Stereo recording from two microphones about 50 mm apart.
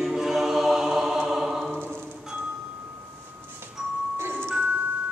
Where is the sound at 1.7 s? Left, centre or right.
Centre.